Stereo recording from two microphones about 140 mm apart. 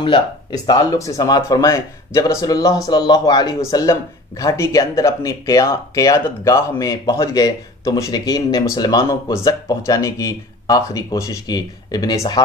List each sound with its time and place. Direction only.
0.0 s speech: 35° left (ahead or behind)